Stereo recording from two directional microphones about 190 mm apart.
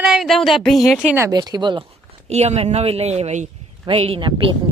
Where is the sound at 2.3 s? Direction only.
35° right (ahead or behind).